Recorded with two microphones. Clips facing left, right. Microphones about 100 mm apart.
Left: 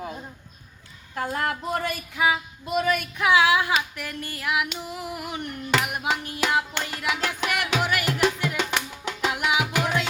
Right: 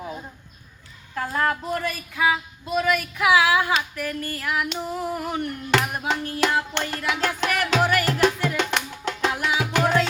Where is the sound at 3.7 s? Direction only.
20° left (ahead or behind).